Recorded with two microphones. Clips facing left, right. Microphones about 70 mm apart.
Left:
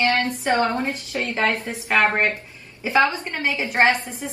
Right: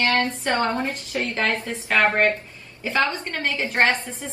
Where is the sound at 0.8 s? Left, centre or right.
Left.